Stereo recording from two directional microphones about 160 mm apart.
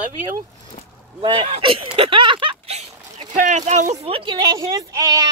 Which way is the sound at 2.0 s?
30° right (ahead or behind).